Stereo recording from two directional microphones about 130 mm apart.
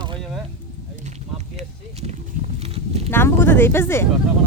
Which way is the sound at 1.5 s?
55° right (ahead or behind).